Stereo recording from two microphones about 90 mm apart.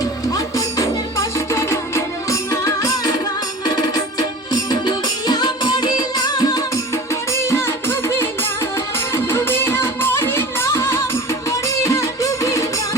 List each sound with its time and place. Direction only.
0.5 s music: 35° left (ahead or behind)
6.9 s music: 30° left (ahead or behind)